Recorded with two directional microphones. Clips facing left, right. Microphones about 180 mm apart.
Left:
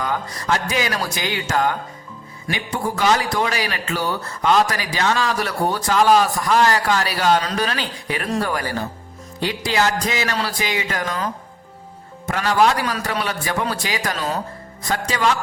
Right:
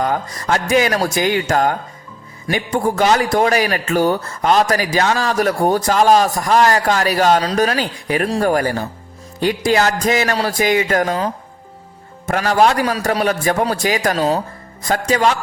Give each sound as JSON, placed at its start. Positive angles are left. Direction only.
{"t": 0.0, "sound": "a man's voice", "side_deg": -45}
{"t": 12.2, "sound": "a man's voice", "side_deg": -45}